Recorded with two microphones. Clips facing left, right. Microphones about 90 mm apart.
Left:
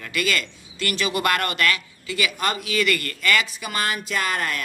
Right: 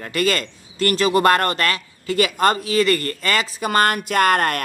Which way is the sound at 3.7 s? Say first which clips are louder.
Right 8 dB; 55° right (ahead or behind).